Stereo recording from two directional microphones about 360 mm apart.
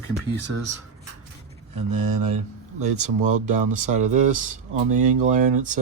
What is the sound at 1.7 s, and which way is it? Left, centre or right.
Speech, right.